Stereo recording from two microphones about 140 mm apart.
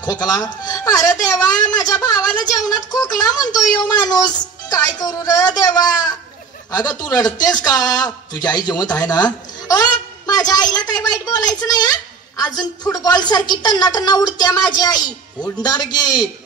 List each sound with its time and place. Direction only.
0.0 s speech: 30° left (ahead or behind)